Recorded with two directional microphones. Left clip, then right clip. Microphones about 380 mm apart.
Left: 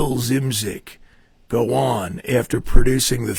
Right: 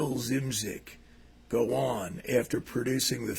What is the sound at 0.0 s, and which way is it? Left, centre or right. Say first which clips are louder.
A man's voice: left 10 dB; left.